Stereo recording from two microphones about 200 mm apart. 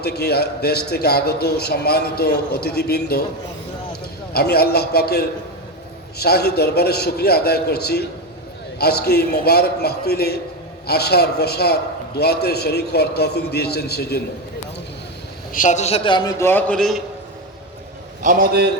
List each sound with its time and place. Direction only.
0.0 s a man's voice: 55° left (ahead or behind)
4.4 s a man's voice: 50° left (ahead or behind)
15.5 s a man's voice: 40° left (ahead or behind); by 17.0 s centre (ahead or behind)
18.2 s a man's voice: 40° right (ahead or behind)